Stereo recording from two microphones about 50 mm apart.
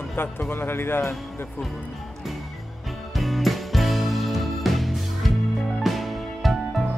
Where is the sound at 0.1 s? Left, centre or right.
Left.